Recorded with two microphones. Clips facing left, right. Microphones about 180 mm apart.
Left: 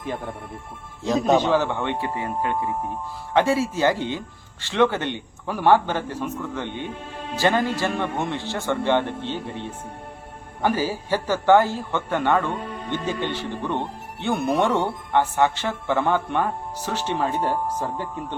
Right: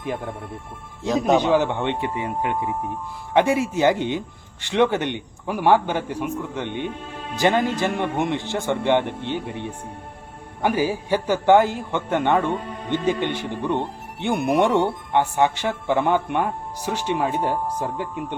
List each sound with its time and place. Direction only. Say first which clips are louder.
1.0 s a man's voice: even; centre (ahead or behind)
1.4 s speech: right 2 dB; 15° right (ahead or behind)